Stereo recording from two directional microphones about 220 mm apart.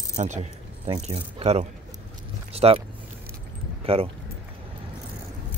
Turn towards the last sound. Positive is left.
turn(degrees=-25)  # may be behind; listen again after turning